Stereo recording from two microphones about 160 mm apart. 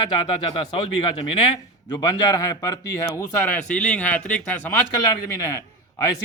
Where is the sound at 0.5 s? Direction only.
35° left (ahead or behind).